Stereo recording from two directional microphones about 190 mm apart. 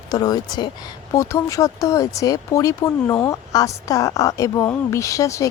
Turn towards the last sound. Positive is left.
turn(degrees=15)  # may be behind; listen again after turning